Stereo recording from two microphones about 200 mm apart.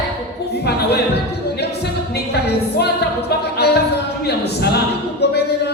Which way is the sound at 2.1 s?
55° left (ahead or behind).